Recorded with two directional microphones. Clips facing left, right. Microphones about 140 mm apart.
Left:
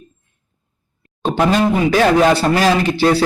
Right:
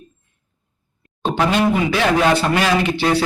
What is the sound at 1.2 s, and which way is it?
Speech, 40° left (ahead or behind).